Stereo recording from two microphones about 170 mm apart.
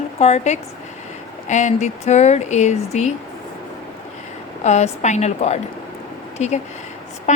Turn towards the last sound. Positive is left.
turn(degrees=40)  # may be behind; listen again after turning